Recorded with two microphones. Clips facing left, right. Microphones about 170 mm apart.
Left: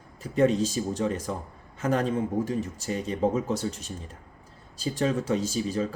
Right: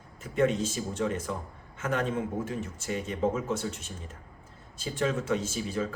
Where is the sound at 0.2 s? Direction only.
35° left (ahead or behind).